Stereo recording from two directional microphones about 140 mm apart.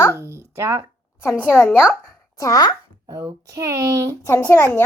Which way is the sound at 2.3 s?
25° left (ahead or behind).